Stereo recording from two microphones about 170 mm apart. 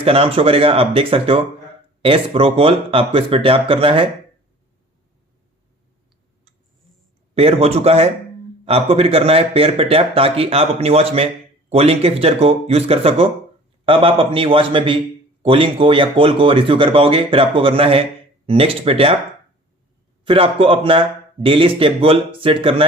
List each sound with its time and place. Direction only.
0.0 s speech: 35° right (ahead or behind)
7.3 s speech: 35° right (ahead or behind)
20.2 s speech: 30° right (ahead or behind)